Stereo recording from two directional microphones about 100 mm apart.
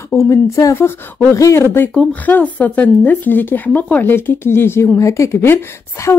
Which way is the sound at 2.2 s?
15° left (ahead or behind).